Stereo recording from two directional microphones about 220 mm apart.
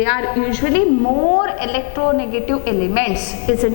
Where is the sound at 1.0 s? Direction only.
25° left (ahead or behind).